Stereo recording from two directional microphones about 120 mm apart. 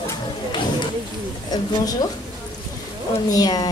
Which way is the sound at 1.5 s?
35° left (ahead or behind).